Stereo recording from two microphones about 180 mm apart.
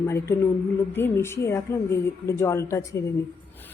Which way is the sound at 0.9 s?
15° left (ahead or behind).